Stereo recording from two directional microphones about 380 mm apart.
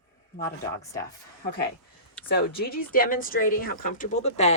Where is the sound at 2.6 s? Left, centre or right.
Left.